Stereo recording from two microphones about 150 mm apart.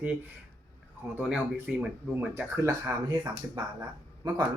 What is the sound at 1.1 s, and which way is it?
Speech, 5° right (ahead or behind).